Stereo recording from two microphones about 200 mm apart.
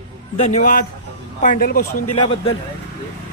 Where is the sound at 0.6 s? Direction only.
45° left (ahead or behind).